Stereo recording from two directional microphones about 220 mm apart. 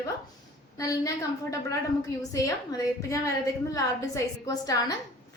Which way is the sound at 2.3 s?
15° left (ahead or behind).